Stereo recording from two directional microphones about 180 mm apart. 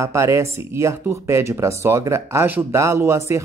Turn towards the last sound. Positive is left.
turn(degrees=-15)  # may be behind; listen again after turning